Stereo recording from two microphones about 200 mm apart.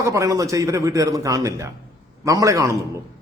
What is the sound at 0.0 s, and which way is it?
A man's voice, 15° right (ahead or behind).